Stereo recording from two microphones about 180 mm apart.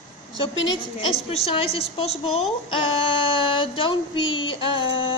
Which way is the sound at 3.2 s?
30° left (ahead or behind).